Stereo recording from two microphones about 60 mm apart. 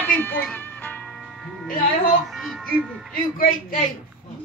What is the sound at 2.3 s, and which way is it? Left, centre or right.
Speech, centre.